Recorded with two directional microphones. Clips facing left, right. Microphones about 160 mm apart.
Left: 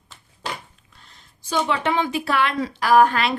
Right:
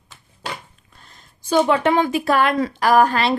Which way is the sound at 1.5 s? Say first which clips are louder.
Right 6 dB; 45° right (ahead or behind).